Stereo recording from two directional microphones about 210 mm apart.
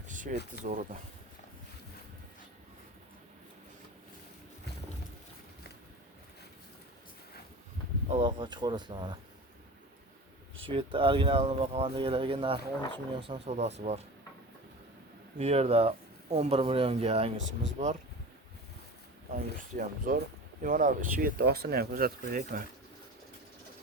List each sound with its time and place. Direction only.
0.1 s a sound: 40° right (ahead or behind)
0.6 s speech: 35° right (ahead or behind)
8.2 s speech: 20° right (ahead or behind)
10.7 s speech: 25° right (ahead or behind)
15.4 s speech: 30° right (ahead or behind)
17.4 s speech: 60° right (ahead or behind)
19.3 s speech: 40° right (ahead or behind)